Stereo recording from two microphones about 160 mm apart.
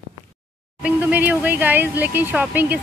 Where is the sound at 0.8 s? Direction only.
5° right (ahead or behind).